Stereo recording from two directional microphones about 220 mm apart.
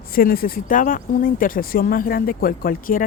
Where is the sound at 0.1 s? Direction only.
40° left (ahead or behind).